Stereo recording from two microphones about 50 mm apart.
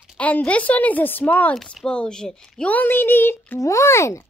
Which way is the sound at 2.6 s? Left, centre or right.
Left.